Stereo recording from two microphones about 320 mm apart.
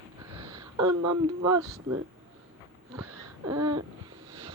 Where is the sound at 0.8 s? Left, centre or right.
Right.